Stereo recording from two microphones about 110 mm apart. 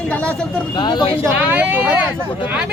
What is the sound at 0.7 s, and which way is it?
Speech, 45° left (ahead or behind).